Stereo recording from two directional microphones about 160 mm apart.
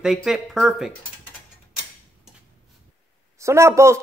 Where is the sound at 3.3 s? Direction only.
15° right (ahead or behind).